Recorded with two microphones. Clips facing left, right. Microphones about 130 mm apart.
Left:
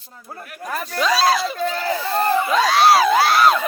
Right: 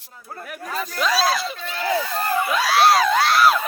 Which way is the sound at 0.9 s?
Centre (ahead or behind).